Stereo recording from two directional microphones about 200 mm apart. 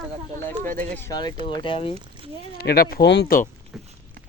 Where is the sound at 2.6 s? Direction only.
50° left (ahead or behind).